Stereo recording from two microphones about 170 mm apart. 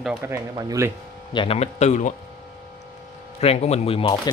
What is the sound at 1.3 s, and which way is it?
Speech, 30° left (ahead or behind).